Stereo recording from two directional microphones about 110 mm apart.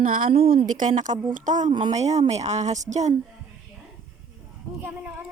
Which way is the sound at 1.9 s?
90° right.